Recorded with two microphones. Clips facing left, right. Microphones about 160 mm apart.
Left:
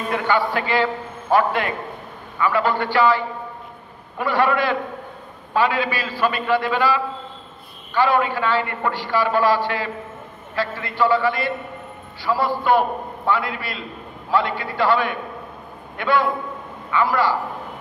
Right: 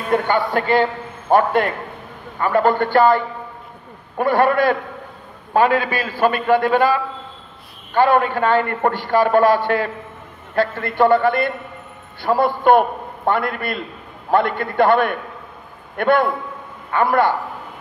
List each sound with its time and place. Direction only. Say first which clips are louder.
0.1 s a man's voice: right 4 dB; 50° right (ahead or behind)